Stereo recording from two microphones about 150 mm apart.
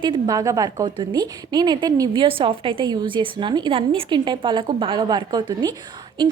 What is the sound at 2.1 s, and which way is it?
A woman's voice, 35° right (ahead or behind).